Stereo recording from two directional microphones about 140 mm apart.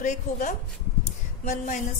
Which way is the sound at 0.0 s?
60° left (ahead or behind).